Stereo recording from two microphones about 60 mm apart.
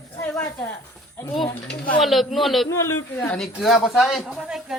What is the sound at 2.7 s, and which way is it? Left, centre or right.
Speech, left.